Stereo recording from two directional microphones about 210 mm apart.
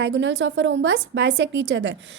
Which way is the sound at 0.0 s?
60° right (ahead or behind).